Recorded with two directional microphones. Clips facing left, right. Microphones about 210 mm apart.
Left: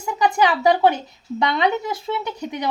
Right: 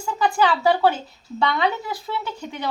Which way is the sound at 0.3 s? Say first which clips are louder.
Left 1 dB; 15° left (ahead or behind).